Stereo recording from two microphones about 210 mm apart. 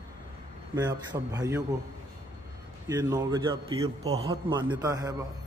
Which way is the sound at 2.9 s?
20° right (ahead or behind).